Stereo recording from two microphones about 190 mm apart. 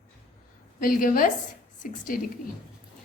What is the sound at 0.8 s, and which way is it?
Speech, 45° left (ahead or behind).